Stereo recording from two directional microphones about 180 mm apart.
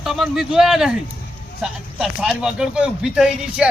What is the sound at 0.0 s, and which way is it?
Speech, centre (ahead or behind).